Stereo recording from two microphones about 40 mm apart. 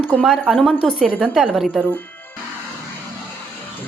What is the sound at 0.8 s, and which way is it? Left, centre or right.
Speech, centre.